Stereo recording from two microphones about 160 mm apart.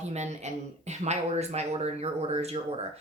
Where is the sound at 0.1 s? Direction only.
45° right (ahead or behind).